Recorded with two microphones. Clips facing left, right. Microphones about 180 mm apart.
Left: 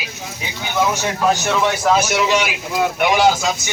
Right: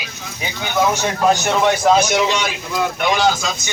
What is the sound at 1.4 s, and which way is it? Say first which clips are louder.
Speech: right 2 dB; 15° right (ahead or behind).